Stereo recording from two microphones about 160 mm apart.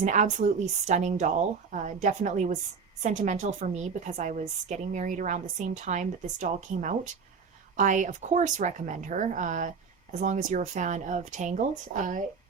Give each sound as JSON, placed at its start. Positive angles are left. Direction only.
{"t": 0.0, "sound": "speech", "side_deg": -50}